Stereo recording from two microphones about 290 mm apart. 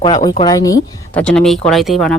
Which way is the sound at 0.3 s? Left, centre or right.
Centre.